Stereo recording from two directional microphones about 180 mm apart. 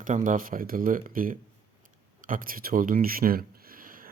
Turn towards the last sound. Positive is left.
turn(degrees=-50)  # may be behind; listen again after turning